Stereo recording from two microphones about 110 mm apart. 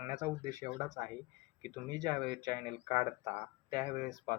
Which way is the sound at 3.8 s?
90° left.